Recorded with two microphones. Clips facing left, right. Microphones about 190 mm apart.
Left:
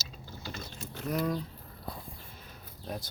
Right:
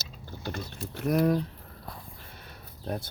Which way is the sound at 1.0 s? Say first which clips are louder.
Right 7 dB; 65° right (ahead or behind).